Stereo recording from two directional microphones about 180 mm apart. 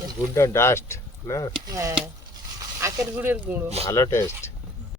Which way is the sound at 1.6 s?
15° right (ahead or behind).